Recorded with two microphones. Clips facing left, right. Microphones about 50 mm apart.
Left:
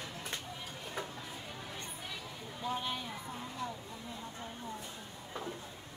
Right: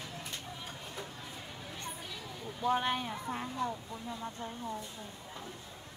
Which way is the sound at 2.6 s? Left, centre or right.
Right.